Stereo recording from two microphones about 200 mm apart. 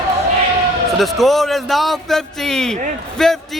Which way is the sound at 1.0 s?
Centre (ahead or behind).